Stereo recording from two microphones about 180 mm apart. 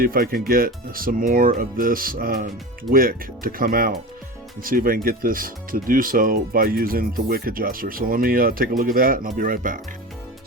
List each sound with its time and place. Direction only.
0.0 s speech: 55° right (ahead or behind)